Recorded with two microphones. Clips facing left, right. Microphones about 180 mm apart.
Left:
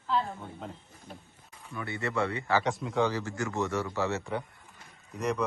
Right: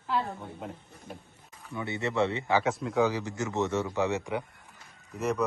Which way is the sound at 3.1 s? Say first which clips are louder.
Right 1 dB; 20° right (ahead or behind).